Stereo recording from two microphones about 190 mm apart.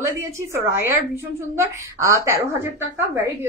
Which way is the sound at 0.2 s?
15° right (ahead or behind).